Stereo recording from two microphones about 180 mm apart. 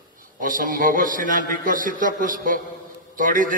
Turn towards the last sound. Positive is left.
turn(degrees=-50)  # may be behind; listen again after turning